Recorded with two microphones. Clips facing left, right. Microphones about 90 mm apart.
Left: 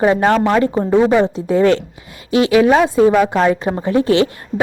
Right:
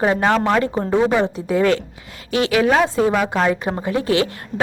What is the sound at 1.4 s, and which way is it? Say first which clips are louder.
A woman's voice: left 4 dB; 30° left (ahead or behind).